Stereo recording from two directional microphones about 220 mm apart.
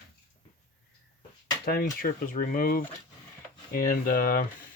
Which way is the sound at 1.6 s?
45° left (ahead or behind).